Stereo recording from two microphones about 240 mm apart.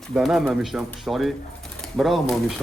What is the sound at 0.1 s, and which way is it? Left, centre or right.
Speech, centre.